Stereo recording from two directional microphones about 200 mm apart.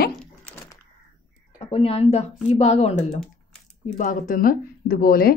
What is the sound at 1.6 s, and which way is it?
Speech, 30° left (ahead or behind).